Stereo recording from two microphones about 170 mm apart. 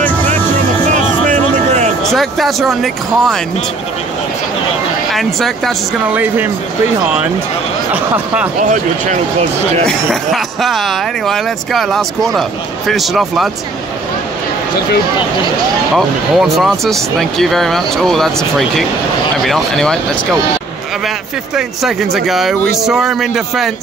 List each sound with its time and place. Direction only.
0.9 s music: 45° right (ahead or behind)
2.0 s speech: centre (ahead or behind)
5.1 s speech: centre (ahead or behind)
6.1 s speech: 10° right (ahead or behind)
9.8 s speech: centre (ahead or behind)
15.9 s speech: centre (ahead or behind)
19.4 s speech: centre (ahead or behind)
21.5 s speech: centre (ahead or behind)